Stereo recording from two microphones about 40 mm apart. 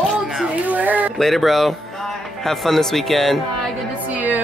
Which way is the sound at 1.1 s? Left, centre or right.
Centre.